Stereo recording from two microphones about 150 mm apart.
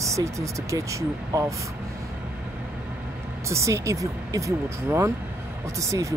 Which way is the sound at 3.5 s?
20° right (ahead or behind).